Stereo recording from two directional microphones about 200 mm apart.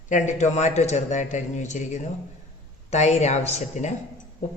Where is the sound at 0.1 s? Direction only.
35° left (ahead or behind).